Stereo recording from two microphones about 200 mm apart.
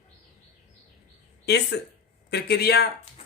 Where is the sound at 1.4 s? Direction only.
55° left (ahead or behind).